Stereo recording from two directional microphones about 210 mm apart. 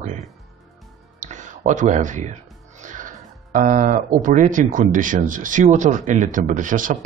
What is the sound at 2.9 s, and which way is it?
Speech, 40° right (ahead or behind).